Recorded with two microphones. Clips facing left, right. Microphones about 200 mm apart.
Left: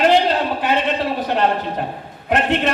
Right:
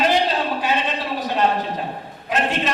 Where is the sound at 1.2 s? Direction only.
60° left (ahead or behind).